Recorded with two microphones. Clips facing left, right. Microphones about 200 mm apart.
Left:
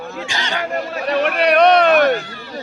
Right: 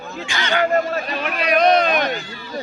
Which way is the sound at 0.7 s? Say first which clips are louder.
Right 4 dB; 45° right (ahead or behind).